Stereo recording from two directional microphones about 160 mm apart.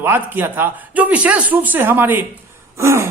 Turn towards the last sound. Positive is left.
turn(degrees=-15)  # may be behind; listen again after turning